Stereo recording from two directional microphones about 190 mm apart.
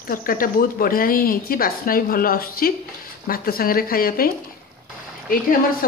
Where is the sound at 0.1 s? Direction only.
50° left (ahead or behind).